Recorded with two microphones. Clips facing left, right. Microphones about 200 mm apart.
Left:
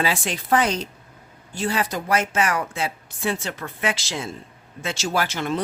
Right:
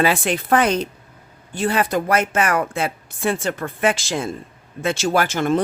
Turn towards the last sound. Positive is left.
turn(degrees=-50)  # may be behind; listen again after turning